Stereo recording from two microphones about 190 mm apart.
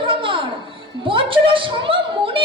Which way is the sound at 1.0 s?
25° right (ahead or behind).